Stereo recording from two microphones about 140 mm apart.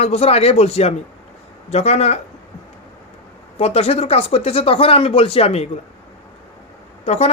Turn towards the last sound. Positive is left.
turn(degrees=50)  # may be behind; listen again after turning